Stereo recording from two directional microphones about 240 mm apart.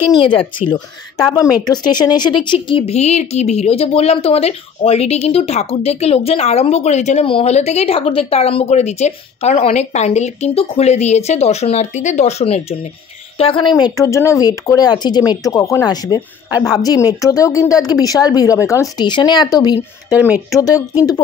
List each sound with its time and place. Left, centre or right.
0.2 s speech: left
20.1 s speech: centre
20.5 s speech: centre